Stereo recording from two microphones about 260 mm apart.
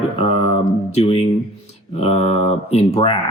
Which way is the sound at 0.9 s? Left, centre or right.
Left.